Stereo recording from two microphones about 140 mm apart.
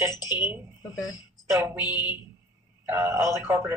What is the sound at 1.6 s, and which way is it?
Speech, 15° right (ahead or behind).